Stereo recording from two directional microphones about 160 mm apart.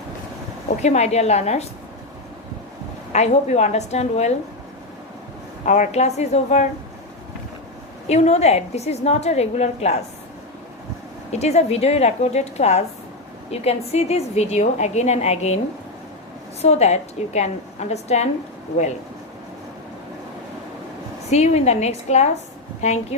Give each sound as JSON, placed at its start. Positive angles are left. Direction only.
{"t": 0.8, "sound": "a woman's voice", "side_deg": 45}
{"t": 3.1, "sound": "a woman's voice", "side_deg": 45}
{"t": 5.6, "sound": "a woman's voice", "side_deg": 50}
{"t": 8.0, "sound": "a woman's voice", "side_deg": 45}
{"t": 11.3, "sound": "a woman's voice", "side_deg": 45}
{"t": 21.2, "sound": "a woman's voice", "side_deg": 45}